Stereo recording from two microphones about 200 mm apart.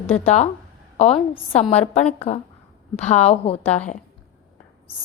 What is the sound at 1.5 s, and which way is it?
A woman's voice, 30° left (ahead or behind).